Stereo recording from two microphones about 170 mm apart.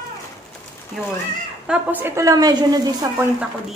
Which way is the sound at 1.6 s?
10° right (ahead or behind).